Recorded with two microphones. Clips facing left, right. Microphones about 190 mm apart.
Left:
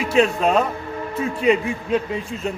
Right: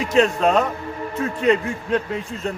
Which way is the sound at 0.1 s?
10° left (ahead or behind).